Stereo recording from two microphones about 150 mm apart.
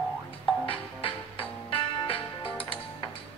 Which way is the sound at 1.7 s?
35° left (ahead or behind).